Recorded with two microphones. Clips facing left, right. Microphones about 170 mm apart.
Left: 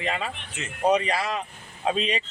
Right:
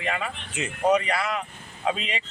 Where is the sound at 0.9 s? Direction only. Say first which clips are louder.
Even; 25° left (ahead or behind).